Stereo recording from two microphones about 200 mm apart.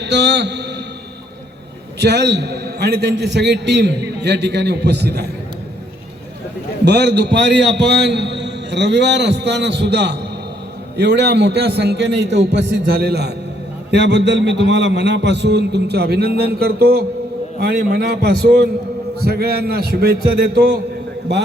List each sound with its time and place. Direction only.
0.0 s a man's voice: 60° right (ahead or behind)
2.0 s a man's voice: 55° right (ahead or behind)
6.8 s a man's voice: 55° right (ahead or behind)